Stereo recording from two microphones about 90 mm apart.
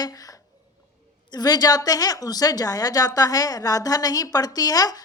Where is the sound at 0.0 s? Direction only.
45° left (ahead or behind).